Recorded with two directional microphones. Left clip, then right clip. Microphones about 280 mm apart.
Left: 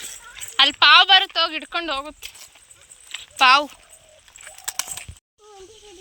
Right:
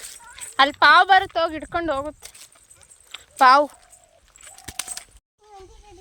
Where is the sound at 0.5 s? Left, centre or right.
Right.